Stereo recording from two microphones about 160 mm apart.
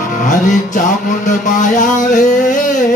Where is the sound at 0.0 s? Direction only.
55° left (ahead or behind).